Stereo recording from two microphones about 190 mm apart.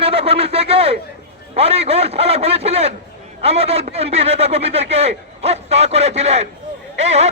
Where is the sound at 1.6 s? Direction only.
35° right (ahead or behind).